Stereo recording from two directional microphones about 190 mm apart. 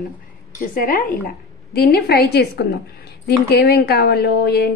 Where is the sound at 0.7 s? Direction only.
50° left (ahead or behind).